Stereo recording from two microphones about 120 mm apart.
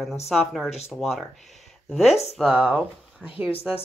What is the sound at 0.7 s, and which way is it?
Speech, 60° left (ahead or behind).